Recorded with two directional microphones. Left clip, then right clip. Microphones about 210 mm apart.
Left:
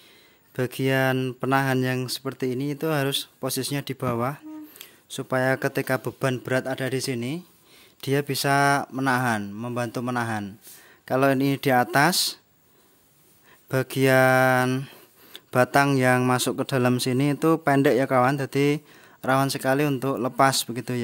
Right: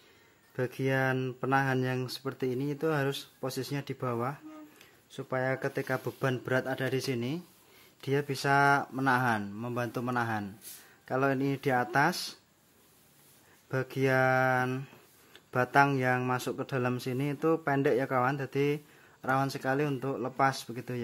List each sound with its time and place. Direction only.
0.6 s speech: 40° left (ahead or behind)
13.7 s speech: 45° left (ahead or behind)